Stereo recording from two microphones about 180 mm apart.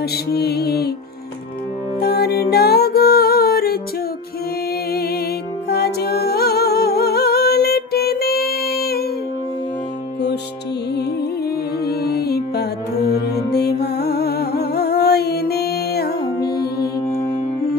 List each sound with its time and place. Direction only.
0.0 s music: 60° left (ahead or behind)
2.0 s music: 60° left (ahead or behind)
4.9 s music: 60° left (ahead or behind)
11.0 s music: 60° left (ahead or behind)